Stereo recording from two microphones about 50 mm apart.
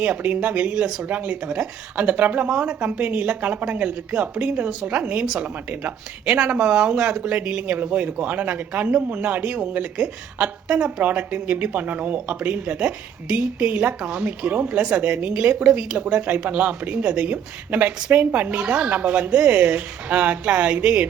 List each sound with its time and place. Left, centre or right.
0.0 s speech: right
11.0 s speech: right
16.0 s speech: right